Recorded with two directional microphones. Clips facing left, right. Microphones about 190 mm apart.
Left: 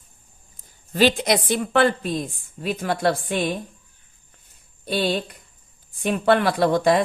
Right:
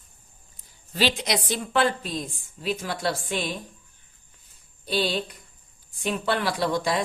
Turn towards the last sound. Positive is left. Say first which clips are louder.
# left 7 dB
turn(degrees=55)  # may be behind; listen again after turning